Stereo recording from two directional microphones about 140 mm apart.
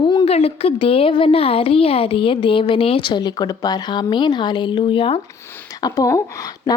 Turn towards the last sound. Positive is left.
turn(degrees=25)  # may be behind; listen again after turning